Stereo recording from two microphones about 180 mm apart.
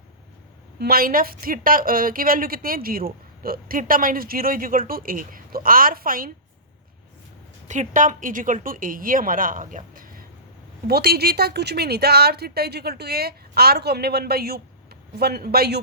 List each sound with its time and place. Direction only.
0.8 s a woman's voice: 55° right (ahead or behind)
7.7 s a woman's voice: 45° right (ahead or behind); by 15.8 s 60° right (ahead or behind)